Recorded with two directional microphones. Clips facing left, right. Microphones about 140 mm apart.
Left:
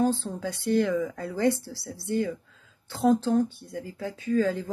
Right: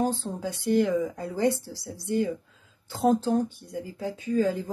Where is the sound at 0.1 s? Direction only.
15° right (ahead or behind).